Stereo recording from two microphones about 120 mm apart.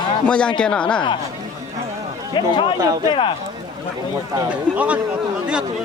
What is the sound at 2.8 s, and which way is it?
Speech, 30° right (ahead or behind).